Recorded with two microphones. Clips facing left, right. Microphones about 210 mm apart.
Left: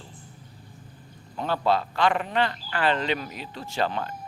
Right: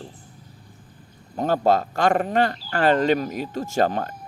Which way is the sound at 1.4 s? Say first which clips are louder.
Right 5 dB; 45° right (ahead or behind).